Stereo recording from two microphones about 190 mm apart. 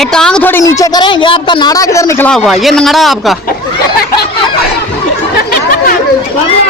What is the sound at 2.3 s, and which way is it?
Speech, centre (ahead or behind).